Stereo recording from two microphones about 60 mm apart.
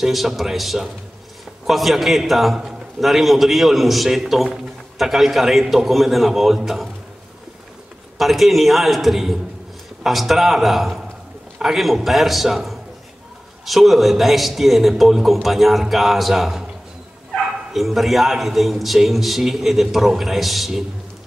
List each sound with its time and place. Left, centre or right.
0.0 s a man's voice: centre
8.2 s a man's voice: centre
17.7 s a man's voice: centre